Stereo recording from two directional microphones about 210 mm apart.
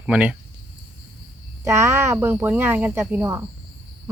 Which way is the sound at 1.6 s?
15° right (ahead or behind).